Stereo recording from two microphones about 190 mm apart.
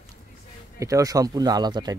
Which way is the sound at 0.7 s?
15° right (ahead or behind).